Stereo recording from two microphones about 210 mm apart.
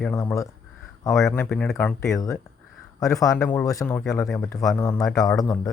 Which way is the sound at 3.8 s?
5° left (ahead or behind).